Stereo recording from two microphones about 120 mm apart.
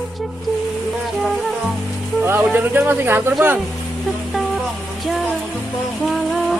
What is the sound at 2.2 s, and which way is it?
Speech, 15° right (ahead or behind).